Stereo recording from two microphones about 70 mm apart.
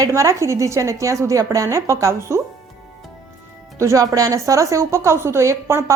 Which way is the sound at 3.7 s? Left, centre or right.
Right.